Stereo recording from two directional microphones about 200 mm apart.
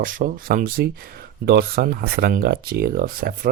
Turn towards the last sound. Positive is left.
turn(degrees=-45)  # may be behind; listen again after turning